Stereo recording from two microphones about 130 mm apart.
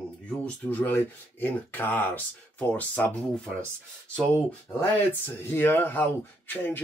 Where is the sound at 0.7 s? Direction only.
15° left (ahead or behind).